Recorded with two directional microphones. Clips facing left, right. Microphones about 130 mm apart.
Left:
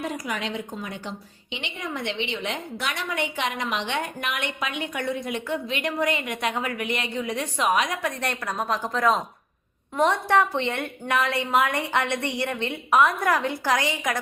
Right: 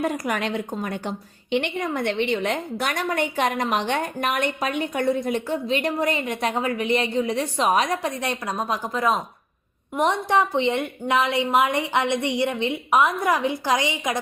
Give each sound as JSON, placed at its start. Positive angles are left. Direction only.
{"t": 0.0, "sound": "a woman's voice", "side_deg": -55}
{"t": 8.2, "sound": "a woman's voice", "side_deg": -20}